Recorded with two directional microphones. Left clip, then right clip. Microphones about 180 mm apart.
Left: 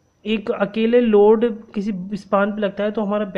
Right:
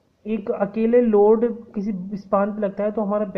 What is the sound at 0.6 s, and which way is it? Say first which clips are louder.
Speech: left 1 dB; 20° left (ahead or behind).